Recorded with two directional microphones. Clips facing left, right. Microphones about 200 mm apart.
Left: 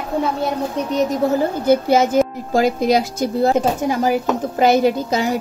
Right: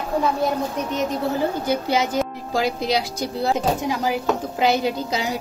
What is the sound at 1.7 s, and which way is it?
Speech, 45° left (ahead or behind).